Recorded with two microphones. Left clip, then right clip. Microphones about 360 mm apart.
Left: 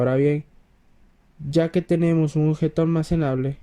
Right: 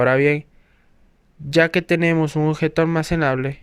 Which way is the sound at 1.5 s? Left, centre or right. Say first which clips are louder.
Right 5 dB; right.